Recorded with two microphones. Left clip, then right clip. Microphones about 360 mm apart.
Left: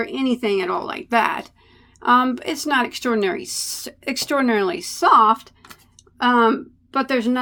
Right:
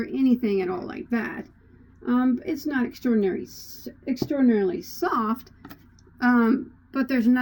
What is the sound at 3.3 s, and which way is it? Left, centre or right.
Speech, left.